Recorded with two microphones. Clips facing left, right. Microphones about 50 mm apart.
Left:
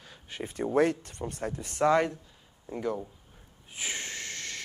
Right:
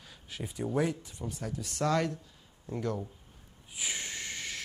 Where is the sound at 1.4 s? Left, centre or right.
Left.